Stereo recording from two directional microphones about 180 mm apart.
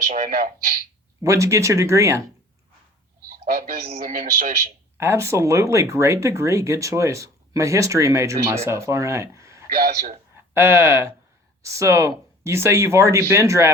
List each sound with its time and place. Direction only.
0.1 s a man's voice: 40° right (ahead or behind)
1.2 s speech: 15° right (ahead or behind)
3.2 s a sound: 55° right (ahead or behind)
4.0 s speech: 55° right (ahead or behind)
4.9 s speech: 15° right (ahead or behind)
9.6 s speech: 55° right (ahead or behind)
10.5 s speech: 15° right (ahead or behind)